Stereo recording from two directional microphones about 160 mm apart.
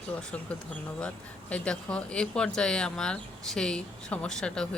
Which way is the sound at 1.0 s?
5° left (ahead or behind).